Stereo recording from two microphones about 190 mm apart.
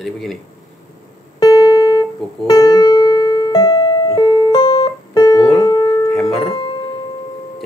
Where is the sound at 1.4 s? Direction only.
20° left (ahead or behind).